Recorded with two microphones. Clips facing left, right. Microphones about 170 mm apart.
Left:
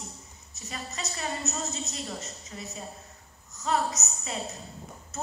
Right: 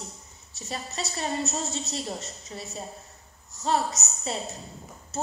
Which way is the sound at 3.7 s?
30° right (ahead or behind).